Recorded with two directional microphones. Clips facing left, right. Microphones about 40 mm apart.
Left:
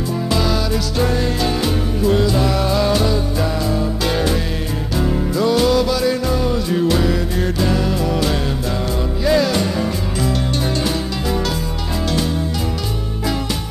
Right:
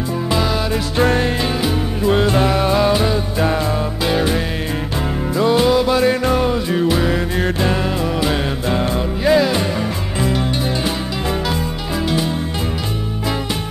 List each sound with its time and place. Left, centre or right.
0.3 s music: centre
0.7 s music: right
1.4 s music: centre
2.0 s music: right
3.4 s music: right
4.0 s music: centre
5.9 s music: right
6.5 s music: right
7.1 s music: right
9.3 s music: centre